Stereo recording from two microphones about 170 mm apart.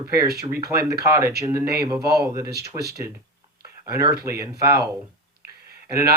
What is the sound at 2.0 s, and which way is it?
Speech, 70° right (ahead or behind).